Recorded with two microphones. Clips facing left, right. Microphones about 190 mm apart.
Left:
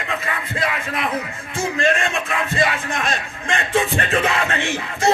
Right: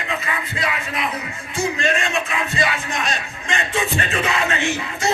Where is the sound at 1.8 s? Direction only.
50° left (ahead or behind).